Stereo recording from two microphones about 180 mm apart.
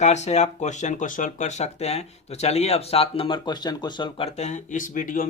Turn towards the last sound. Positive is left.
turn(degrees=50)  # may be behind; listen again after turning